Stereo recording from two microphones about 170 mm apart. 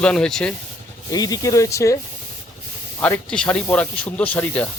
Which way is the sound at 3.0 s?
10° left (ahead or behind).